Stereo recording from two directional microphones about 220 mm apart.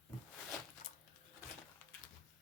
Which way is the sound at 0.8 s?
40° left (ahead or behind).